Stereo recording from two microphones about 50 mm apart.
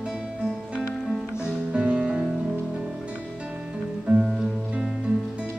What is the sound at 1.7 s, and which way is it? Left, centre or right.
Music, centre.